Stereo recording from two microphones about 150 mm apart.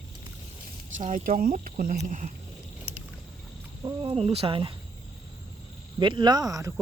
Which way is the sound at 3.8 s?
30° right (ahead or behind).